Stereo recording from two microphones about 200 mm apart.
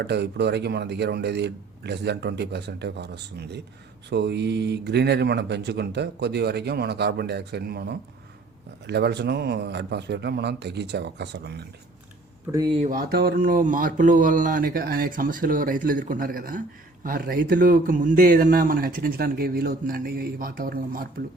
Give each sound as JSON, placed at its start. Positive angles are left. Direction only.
{"t": 0.0, "sound": "speech", "side_deg": -55}
{"t": 4.1, "sound": "speech", "side_deg": -60}
{"t": 12.5, "sound": "speech", "side_deg": -20}
{"t": 12.8, "sound": "speech", "side_deg": -45}